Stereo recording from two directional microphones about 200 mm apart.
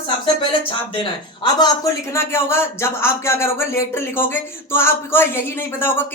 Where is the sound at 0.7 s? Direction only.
25° left (ahead or behind).